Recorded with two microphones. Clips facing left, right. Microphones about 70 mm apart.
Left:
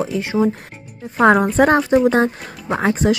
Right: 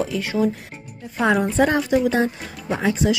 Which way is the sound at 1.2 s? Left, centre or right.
Left.